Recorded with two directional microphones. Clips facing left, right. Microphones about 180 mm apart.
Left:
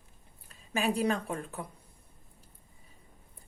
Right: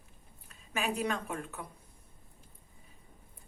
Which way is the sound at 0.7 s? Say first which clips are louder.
Left 4 dB; 35° left (ahead or behind).